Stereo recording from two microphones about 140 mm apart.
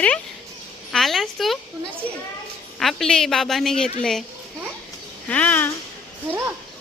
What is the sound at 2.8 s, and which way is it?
A woman's voice, centre (ahead or behind).